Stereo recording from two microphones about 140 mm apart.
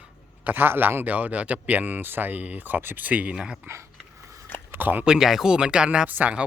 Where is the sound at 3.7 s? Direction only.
20° right (ahead or behind).